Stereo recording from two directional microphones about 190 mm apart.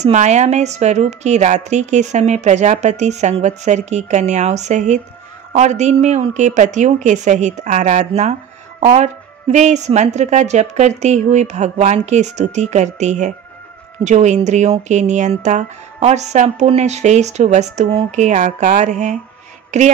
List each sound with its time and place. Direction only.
0.0 s a woman's voice: 35° right (ahead or behind)